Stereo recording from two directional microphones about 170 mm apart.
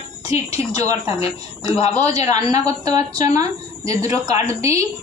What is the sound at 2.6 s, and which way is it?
A woman's voice, 20° right (ahead or behind).